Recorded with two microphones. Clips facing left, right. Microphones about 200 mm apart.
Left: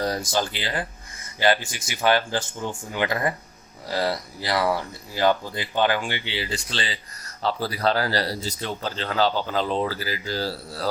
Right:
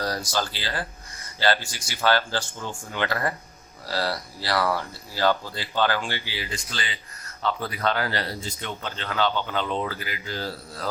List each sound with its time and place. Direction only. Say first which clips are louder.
0.0 s speech: left 3 dB; 25° left (ahead or behind)